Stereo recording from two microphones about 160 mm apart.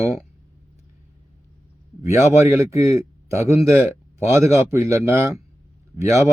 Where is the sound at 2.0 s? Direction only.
15° right (ahead or behind).